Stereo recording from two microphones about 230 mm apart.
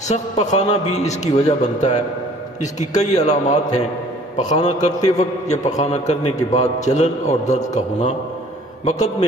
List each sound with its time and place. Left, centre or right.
0.1 s a man's voice: left